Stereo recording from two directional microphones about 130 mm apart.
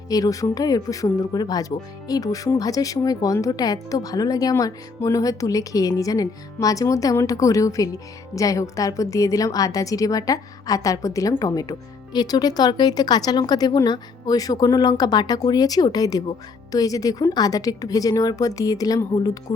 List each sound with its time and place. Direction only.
0.1 s a woman's voice: 25° left (ahead or behind)